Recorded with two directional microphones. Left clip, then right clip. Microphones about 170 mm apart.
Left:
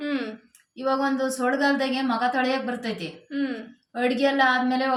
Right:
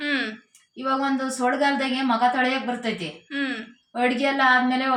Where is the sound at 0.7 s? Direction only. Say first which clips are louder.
Even; 35° right (ahead or behind).